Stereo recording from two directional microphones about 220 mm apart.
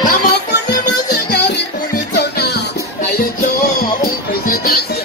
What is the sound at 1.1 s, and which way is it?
Music, 45° left (ahead or behind).